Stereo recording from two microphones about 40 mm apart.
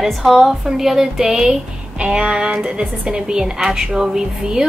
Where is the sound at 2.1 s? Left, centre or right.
Right.